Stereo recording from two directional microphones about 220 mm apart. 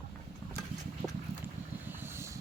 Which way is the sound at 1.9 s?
10° right (ahead or behind).